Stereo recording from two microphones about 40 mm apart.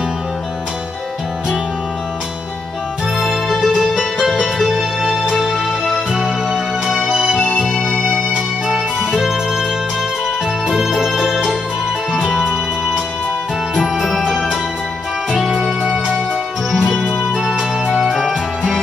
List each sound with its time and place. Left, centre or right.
3.2 s music: centre
8.6 s music: centre
10.7 s organ: centre
12.1 s music: centre
15.3 s music: centre
16.7 s music: centre